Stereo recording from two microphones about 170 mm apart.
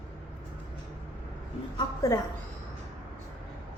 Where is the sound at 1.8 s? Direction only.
20° left (ahead or behind).